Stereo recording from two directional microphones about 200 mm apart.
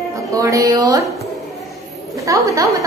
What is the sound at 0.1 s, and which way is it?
Speech, 15° right (ahead or behind).